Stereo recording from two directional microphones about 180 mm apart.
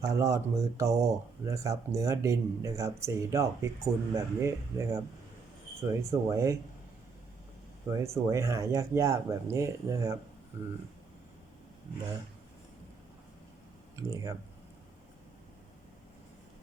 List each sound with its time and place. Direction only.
0.0 s speech: 15° right (ahead or behind)
7.9 s speech: 15° right (ahead or behind)
13.9 s speech: 20° right (ahead or behind)